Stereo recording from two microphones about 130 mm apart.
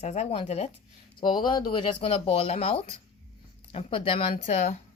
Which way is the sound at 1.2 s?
35° left (ahead or behind).